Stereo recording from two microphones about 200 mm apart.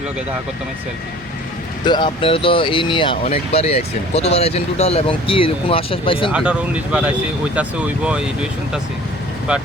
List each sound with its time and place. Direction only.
1.8 s speech: 20° left (ahead or behind)
6.3 s speech: 5° right (ahead or behind)